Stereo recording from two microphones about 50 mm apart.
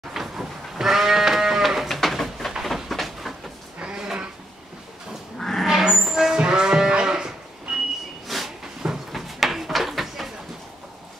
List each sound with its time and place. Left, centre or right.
0.1 s sheep: centre
2.6 s a sound: centre
3.8 s a sound: centre
5.4 s vehicle: centre
5.7 s livestock: centre
8.3 s drawer open or close: centre